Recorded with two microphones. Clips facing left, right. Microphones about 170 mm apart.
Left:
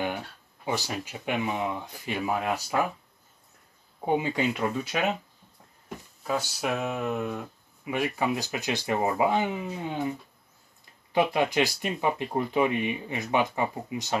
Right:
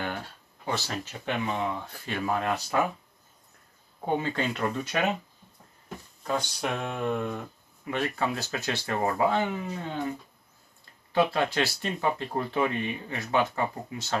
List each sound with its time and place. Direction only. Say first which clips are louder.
0.7 s speech: left 1 dB; 10° left (ahead or behind)
4.0 s speech: left 2 dB; 15° left (ahead or behind)
6.2 s speech: left 1 dB; 5° left (ahead or behind)
11.1 s speech: left 1 dB; 15° left (ahead or behind)